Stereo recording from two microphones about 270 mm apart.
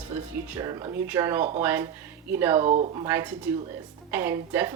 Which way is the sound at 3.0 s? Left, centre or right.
Centre.